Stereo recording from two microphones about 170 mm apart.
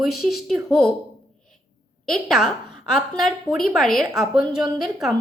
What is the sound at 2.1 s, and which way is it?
A woman's voice, centre (ahead or behind).